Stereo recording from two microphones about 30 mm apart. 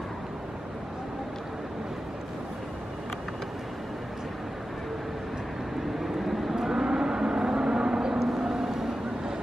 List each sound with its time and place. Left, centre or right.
6.1 s vehicle: centre